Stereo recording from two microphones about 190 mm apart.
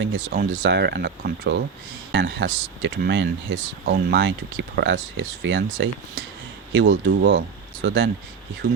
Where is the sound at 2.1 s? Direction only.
70° right (ahead or behind).